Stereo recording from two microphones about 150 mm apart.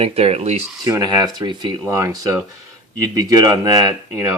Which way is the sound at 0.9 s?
25° right (ahead or behind).